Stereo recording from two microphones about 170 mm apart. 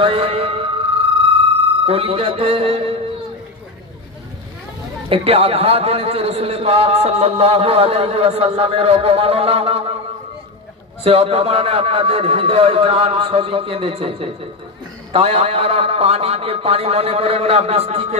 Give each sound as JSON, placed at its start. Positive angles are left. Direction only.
{"t": 0.0, "sound": "music", "side_deg": -35}
{"t": 1.9, "sound": "a man's voice", "side_deg": -35}
{"t": 5.1, "sound": "a man's voice", "side_deg": -35}
{"t": 11.1, "sound": "a man's voice", "side_deg": -35}